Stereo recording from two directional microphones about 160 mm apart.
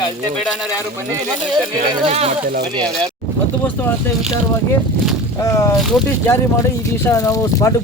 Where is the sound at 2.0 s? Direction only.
40° right (ahead or behind).